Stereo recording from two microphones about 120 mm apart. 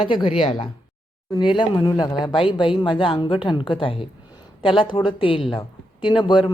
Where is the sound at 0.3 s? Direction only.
50° left (ahead or behind).